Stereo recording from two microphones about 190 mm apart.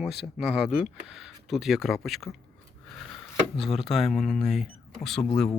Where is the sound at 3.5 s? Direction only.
Centre (ahead or behind).